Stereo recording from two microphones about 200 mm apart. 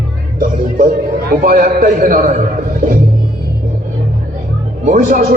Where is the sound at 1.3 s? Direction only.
45° right (ahead or behind).